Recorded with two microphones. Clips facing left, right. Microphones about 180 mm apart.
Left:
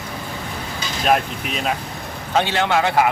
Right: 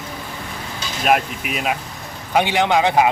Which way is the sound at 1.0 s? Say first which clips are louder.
Right 1 dB; 5° right (ahead or behind).